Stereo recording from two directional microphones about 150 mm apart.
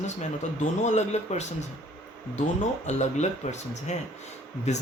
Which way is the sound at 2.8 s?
50° left (ahead or behind).